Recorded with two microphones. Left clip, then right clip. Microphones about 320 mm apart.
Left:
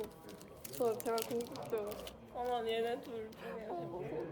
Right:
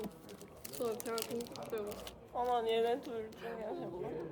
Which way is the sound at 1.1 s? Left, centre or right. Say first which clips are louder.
Left 2 dB; centre.